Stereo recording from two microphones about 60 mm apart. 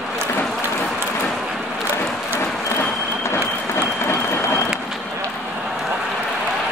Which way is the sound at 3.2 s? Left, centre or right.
Left.